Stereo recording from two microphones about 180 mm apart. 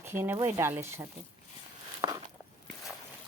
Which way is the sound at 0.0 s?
15° right (ahead or behind).